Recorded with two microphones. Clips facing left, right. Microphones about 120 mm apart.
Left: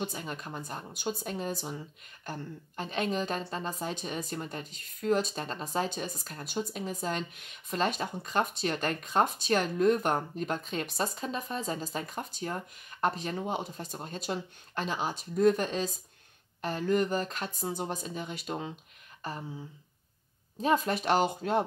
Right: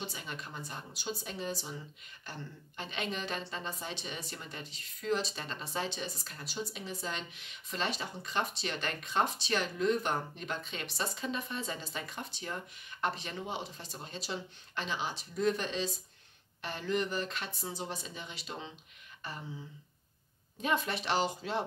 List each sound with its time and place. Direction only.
0.0 s a woman's voice: 45° left (ahead or behind)
19.2 s a sound: 40° left (ahead or behind)
20.6 s a woman's voice: 40° left (ahead or behind)